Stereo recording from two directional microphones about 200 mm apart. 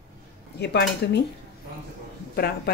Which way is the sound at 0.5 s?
55° left (ahead or behind).